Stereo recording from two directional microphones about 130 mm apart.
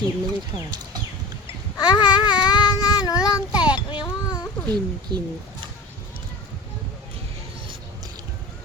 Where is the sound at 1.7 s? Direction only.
35° left (ahead or behind).